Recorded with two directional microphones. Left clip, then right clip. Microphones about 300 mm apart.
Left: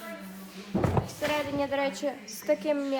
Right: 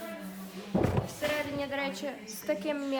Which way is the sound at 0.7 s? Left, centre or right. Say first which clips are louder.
Even; right.